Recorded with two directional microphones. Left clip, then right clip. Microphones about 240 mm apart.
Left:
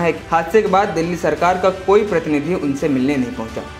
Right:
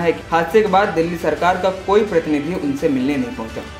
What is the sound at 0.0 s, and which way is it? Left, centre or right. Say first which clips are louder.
Speech: even; left.